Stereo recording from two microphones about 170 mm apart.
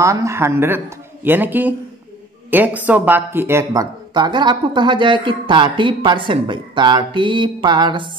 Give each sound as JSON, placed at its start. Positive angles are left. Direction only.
{"t": 0.0, "sound": "speech", "side_deg": -20}